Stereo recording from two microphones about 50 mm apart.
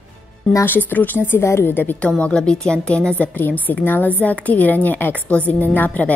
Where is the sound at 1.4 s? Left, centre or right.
Left.